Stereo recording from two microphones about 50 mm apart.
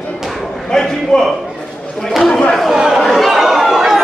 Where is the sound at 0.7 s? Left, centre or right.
Centre.